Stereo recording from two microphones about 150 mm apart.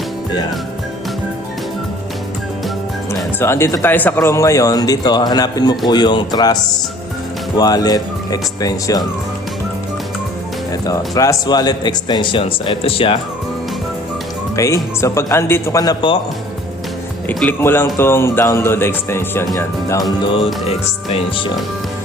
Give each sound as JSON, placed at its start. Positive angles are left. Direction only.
{"t": 3.4, "sound": "speech", "side_deg": 15}
{"t": 10.8, "sound": "speech", "side_deg": 25}
{"t": 14.5, "sound": "speech", "side_deg": 20}
{"t": 17.2, "sound": "speech", "side_deg": 15}